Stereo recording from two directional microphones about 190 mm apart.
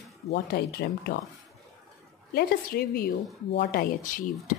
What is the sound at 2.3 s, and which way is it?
Speech, 55° left (ahead or behind).